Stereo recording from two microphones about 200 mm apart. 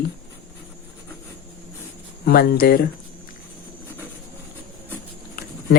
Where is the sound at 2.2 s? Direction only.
50° left (ahead or behind).